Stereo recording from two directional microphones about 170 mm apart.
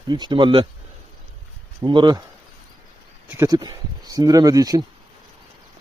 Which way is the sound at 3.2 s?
20° right (ahead or behind).